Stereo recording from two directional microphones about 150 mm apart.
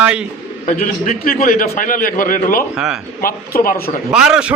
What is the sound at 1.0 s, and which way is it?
A man's voice, 70° left (ahead or behind).